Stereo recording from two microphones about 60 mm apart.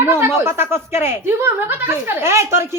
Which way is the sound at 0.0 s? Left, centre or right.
Right.